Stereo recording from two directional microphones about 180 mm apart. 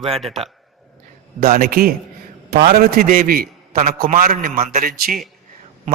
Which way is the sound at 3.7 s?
40° right (ahead or behind).